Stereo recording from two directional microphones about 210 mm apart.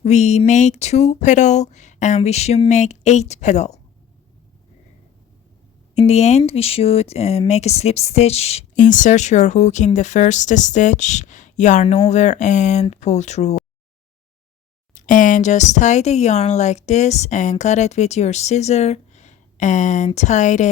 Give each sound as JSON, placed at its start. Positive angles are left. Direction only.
{"t": 0.0, "sound": "speech", "side_deg": 35}
{"t": 6.0, "sound": "speech", "side_deg": 30}
{"t": 14.9, "sound": "speech", "side_deg": 40}